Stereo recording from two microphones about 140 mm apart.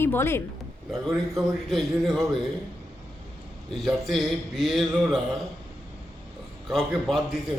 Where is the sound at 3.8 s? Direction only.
Centre (ahead or behind).